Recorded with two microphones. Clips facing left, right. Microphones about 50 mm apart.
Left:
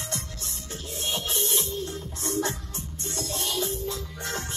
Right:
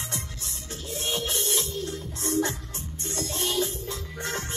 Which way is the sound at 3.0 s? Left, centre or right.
Right.